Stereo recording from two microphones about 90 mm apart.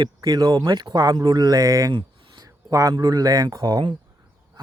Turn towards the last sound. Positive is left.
turn(degrees=-55)  # may be behind; listen again after turning